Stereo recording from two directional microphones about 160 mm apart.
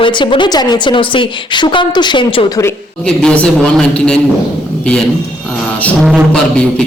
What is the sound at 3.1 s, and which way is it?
Speech, 5° left (ahead or behind).